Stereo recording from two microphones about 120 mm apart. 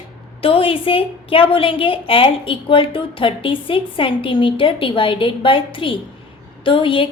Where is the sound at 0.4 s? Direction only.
50° left (ahead or behind).